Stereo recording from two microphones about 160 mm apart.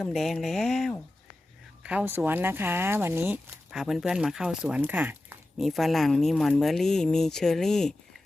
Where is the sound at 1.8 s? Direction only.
10° right (ahead or behind).